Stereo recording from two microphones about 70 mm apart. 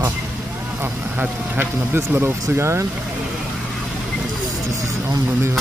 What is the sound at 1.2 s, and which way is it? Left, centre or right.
Speech, right.